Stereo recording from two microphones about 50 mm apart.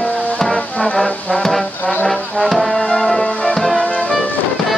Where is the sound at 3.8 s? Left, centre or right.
Left.